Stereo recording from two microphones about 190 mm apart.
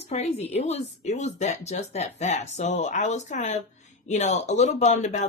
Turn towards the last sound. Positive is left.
turn(degrees=40)  # may be behind; listen again after turning